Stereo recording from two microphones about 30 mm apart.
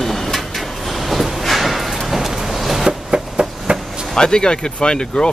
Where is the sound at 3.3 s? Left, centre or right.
Right.